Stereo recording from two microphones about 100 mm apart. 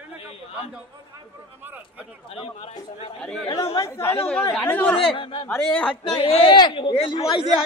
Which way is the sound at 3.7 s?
30° left (ahead or behind).